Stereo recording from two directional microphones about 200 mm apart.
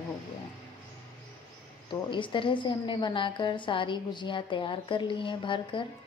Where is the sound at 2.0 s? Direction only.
25° left (ahead or behind).